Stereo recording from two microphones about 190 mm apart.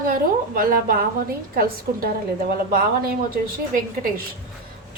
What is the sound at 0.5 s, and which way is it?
Speech, 50° right (ahead or behind).